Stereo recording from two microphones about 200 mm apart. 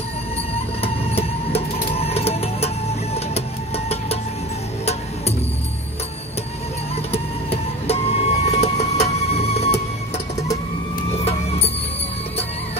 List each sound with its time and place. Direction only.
0.7 s music: 30° left (ahead or behind)
7.1 s music: 30° left (ahead or behind)